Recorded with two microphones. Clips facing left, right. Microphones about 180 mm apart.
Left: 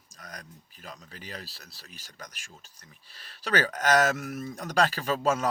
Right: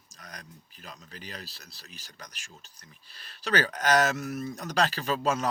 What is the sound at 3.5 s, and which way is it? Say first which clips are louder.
Speech: left 1 dB; 45° left (ahead or behind).